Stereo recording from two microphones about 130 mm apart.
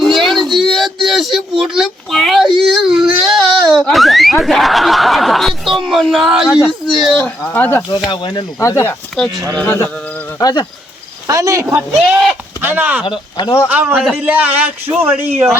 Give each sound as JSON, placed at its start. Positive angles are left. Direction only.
{"t": 0.0, "sound": "a sound", "side_deg": 0}
{"t": 7.2, "sound": "a sound", "side_deg": 10}
{"t": 8.1, "sound": "speech", "side_deg": 35}
{"t": 8.6, "sound": "speech", "side_deg": 20}
{"t": 10.4, "sound": "speech", "side_deg": 30}
{"t": 11.3, "sound": "speech", "side_deg": -25}
{"t": 12.0, "sound": "speech", "side_deg": -5}
{"t": 13.1, "sound": "speech", "side_deg": 35}
{"t": 13.7, "sound": "speech", "side_deg": -10}
{"t": 13.9, "sound": "a man's voice", "side_deg": 0}
{"t": 14.2, "sound": "speech", "side_deg": -10}